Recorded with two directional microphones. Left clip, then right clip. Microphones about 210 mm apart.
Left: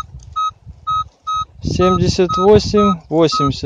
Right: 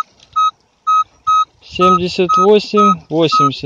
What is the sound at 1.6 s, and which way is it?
Speech, 10° left (ahead or behind).